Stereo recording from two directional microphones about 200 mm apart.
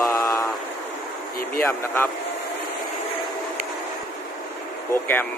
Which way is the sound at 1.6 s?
10° left (ahead or behind).